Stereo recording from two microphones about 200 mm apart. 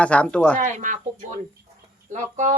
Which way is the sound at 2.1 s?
35° right (ahead or behind).